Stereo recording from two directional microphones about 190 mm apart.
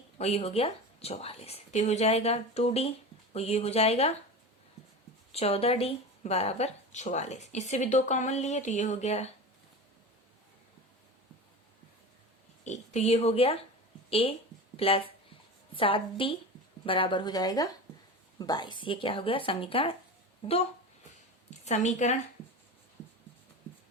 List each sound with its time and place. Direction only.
0.2 s speech: 35° left (ahead or behind)
5.3 s speech: 30° left (ahead or behind)
12.6 s speech: 35° left (ahead or behind)
21.6 s speech: 35° left (ahead or behind)